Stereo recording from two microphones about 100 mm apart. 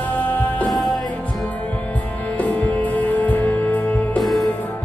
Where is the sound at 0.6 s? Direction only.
Centre (ahead or behind).